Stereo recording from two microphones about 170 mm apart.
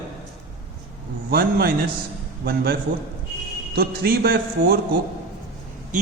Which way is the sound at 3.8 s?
65° right (ahead or behind).